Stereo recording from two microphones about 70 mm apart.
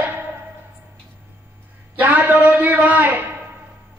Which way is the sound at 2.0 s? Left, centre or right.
Right.